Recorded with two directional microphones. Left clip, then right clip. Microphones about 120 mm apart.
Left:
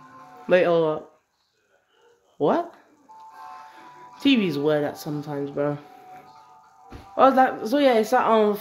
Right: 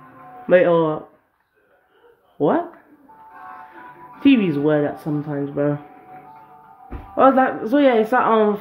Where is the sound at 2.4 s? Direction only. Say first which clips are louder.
Right 3 dB; 25° left (ahead or behind).